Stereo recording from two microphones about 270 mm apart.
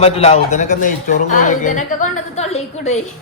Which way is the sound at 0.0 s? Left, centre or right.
Left.